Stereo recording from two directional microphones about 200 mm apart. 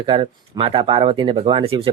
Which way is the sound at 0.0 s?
25° right (ahead or behind).